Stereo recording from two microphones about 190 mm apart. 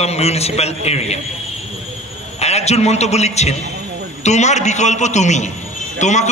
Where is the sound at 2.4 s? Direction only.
35° left (ahead or behind).